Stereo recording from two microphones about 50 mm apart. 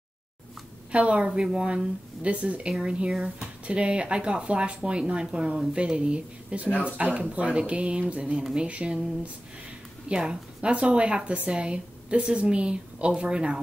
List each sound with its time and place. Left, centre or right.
0.9 s a woman's voice: right